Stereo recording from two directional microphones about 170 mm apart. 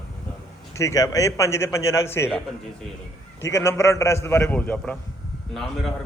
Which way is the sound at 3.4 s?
15° left (ahead or behind).